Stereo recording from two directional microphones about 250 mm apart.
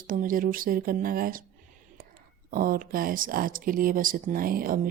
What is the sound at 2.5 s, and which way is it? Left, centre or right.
Speech, right.